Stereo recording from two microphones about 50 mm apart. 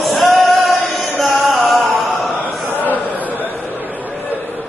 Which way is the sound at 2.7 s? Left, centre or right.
Left.